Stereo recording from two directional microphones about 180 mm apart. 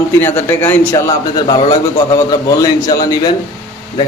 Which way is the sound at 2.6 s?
20° left (ahead or behind).